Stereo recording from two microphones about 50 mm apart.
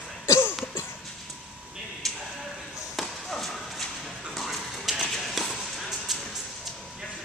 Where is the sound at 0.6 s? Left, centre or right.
Left.